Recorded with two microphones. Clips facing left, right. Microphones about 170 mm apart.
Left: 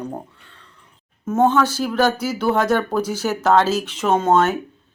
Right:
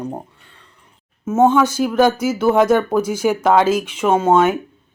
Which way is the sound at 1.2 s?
10° right (ahead or behind).